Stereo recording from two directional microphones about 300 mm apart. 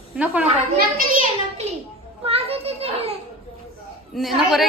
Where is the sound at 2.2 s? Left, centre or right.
Centre.